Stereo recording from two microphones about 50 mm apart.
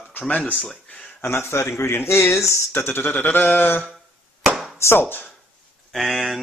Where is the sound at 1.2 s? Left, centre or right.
Left.